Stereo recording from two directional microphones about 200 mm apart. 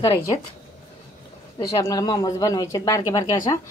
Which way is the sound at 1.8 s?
20° left (ahead or behind).